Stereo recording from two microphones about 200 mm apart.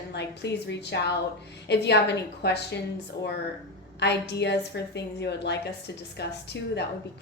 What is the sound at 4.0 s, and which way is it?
A woman's voice, 55° left (ahead or behind).